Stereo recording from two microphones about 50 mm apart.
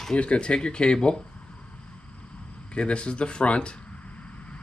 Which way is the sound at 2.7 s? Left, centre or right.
Left.